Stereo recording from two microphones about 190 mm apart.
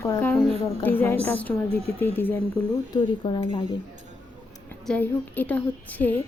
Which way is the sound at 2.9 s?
25° left (ahead or behind).